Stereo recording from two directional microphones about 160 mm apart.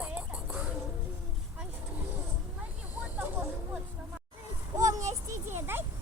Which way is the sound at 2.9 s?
10° right (ahead or behind).